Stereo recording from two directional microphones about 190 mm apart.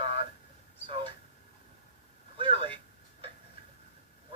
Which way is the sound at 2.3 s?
25° right (ahead or behind).